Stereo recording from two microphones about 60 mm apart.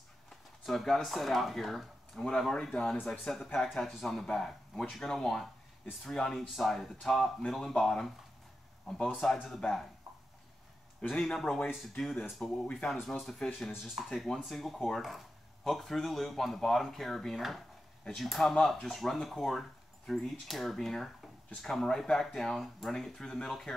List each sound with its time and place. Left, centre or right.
0.7 s speech: centre
11.0 s speech: centre
12.1 s speech: centre